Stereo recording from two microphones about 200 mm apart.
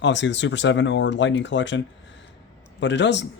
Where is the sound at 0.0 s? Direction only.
65° left (ahead or behind).